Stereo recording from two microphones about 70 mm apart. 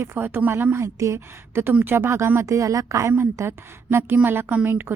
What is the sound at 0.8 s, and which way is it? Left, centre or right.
A woman's voice, right.